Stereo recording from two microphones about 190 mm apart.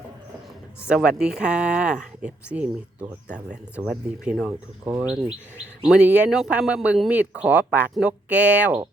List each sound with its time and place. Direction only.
0.9 s speech: 5° right (ahead or behind)